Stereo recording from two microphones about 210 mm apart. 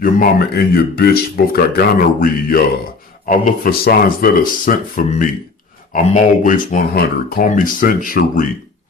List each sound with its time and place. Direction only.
0.0 s speech: 45° left (ahead or behind)